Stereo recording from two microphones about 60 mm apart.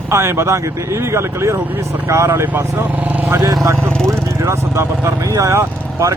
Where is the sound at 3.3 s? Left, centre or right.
Right.